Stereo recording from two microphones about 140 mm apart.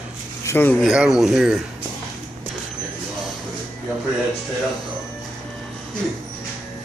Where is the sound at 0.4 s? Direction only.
20° left (ahead or behind).